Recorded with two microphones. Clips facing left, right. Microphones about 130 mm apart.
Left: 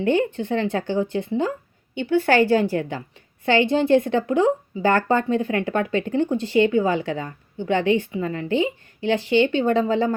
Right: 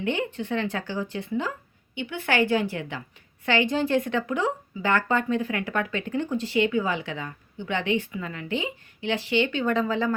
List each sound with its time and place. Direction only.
0.0 s speech: 35° left (ahead or behind)